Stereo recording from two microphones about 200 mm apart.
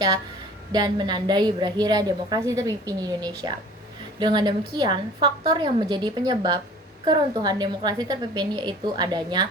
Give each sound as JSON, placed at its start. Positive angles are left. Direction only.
{"t": 0.7, "sound": "a woman's voice", "side_deg": -20}